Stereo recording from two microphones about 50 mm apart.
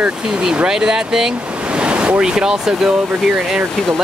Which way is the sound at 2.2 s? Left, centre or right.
Centre.